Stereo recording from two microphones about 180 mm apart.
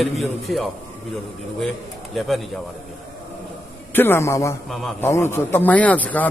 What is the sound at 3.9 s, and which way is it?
A man's voice, 10° left (ahead or behind).